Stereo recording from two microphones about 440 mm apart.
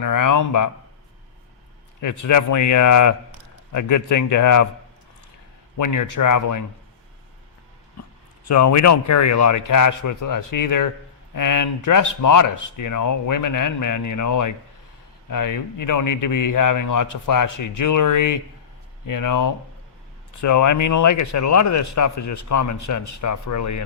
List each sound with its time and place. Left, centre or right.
0.0 s speech: left
2.0 s speech: left
5.7 s speech: left
8.0 s a sound: left
8.4 s speech: left